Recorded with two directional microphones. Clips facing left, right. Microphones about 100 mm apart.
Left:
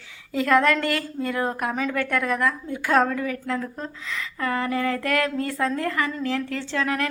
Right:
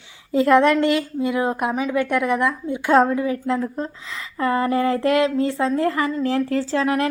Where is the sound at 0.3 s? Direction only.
25° right (ahead or behind).